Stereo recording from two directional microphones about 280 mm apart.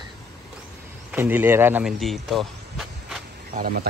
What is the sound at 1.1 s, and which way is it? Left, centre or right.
Speech, centre.